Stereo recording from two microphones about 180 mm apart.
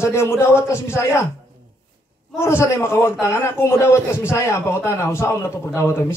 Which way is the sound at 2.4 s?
15° left (ahead or behind).